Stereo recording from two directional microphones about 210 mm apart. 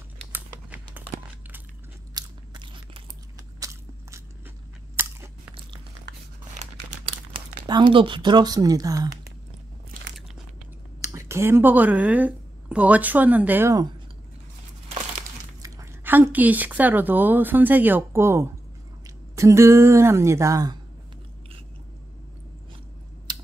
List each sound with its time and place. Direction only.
0.3 s crumpling: 10° right (ahead or behind)
2.1 s biting: 20° right (ahead or behind)
4.9 s crunch: 10° right (ahead or behind)
6.5 s crumpling: 30° right (ahead or behind)
11.0 s speech: 15° right (ahead or behind)
15.6 s speech: 10° right (ahead or behind)
23.3 s a sound: 20° right (ahead or behind)